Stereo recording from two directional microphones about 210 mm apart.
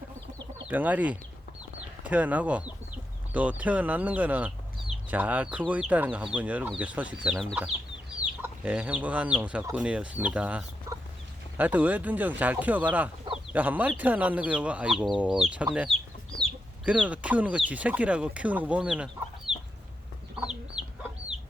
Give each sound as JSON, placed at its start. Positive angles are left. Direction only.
{"t": 0.7, "sound": "speech", "side_deg": -5}
{"t": 19.5, "sound": "chicken", "side_deg": -30}
{"t": 20.4, "sound": "chicken", "side_deg": -5}